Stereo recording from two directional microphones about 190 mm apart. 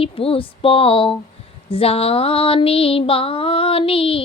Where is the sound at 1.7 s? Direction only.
30° left (ahead or behind).